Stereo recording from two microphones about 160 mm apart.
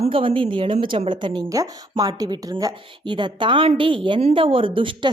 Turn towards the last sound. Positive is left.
turn(degrees=-35)  # may be behind; listen again after turning